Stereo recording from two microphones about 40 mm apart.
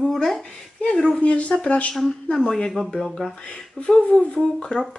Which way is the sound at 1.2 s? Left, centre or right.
Left.